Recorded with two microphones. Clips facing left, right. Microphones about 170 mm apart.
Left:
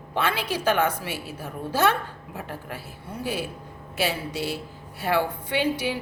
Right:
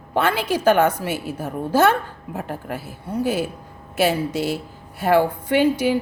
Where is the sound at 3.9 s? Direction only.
50° right (ahead or behind).